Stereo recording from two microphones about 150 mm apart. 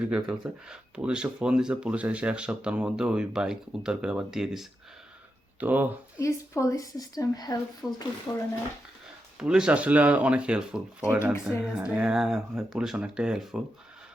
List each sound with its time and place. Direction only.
0.0 s speech: 5° right (ahead or behind)
6.1 s a woman's voice: 20° left (ahead or behind)
9.4 s speech: 5° right (ahead or behind)